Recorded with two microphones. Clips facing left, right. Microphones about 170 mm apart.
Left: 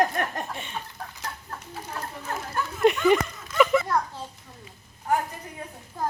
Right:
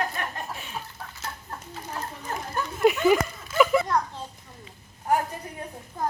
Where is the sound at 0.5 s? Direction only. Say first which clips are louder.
Left 1 dB; centre (ahead or behind).